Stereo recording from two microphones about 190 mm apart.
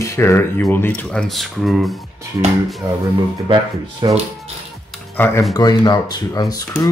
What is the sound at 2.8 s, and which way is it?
Speech, 20° right (ahead or behind).